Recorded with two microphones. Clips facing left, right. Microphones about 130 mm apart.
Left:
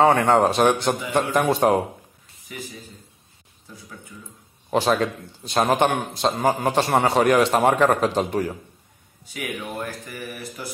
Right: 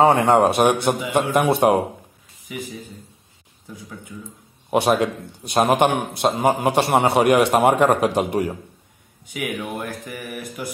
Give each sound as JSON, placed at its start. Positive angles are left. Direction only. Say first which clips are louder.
{"t": 0.6, "sound": "a man's voice", "louder": "right 1 dB", "side_deg": -10}
{"t": 4.6, "sound": "a man's voice", "louder": "right 2 dB", "side_deg": -15}